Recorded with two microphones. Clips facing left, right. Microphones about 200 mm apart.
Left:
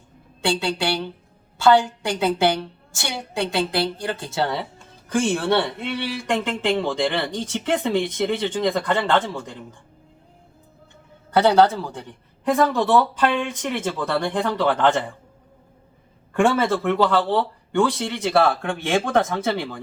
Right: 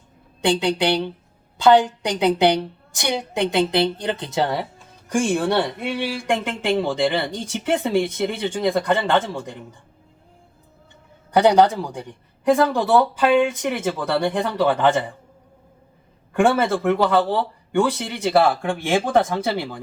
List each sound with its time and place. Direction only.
0.4 s a woman's voice: 20° right (ahead or behind)
11.3 s speech: 15° right (ahead or behind)
16.3 s speech: 10° right (ahead or behind)